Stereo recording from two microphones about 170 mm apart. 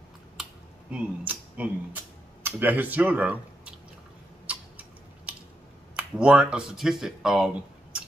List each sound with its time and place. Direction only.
0.4 s computer keyboard: 5° right (ahead or behind)
2.4 s speech: 10° right (ahead or behind)
4.5 s a sound: 5° right (ahead or behind)
5.9 s speech: 5° right (ahead or behind)